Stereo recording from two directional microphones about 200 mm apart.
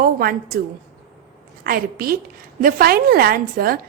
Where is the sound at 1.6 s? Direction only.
50° right (ahead or behind).